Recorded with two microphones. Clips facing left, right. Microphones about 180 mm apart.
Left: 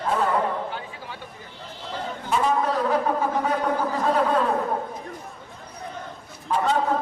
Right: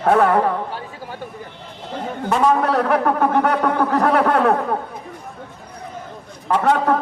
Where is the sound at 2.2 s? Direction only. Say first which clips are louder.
Right 6 dB; 70° right (ahead or behind).